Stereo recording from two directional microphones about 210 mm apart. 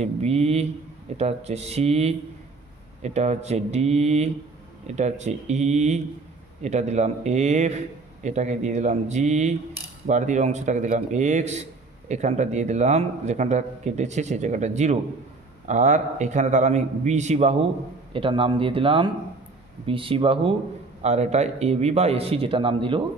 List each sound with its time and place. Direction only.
0.0 s a man's voice: 30° right (ahead or behind)